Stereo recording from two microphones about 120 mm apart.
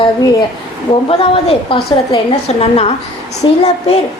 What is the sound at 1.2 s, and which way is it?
A woman's voice, 50° left (ahead or behind).